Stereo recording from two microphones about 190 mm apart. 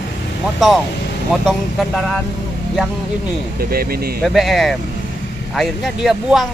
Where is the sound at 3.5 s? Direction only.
50° right (ahead or behind).